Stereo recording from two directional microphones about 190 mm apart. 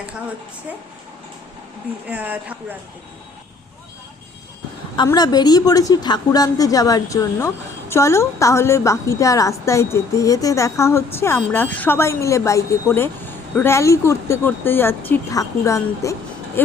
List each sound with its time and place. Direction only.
2.0 s speech: 10° right (ahead or behind)
4.9 s a woman's voice: 20° left (ahead or behind)